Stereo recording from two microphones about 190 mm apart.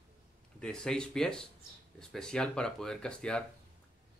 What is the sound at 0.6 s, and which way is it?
Speech, 5° left (ahead or behind).